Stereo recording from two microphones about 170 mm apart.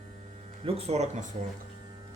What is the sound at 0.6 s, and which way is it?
Speech, 40° right (ahead or behind).